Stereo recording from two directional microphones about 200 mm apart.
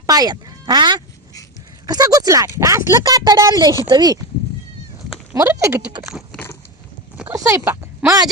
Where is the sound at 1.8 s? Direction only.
20° right (ahead or behind).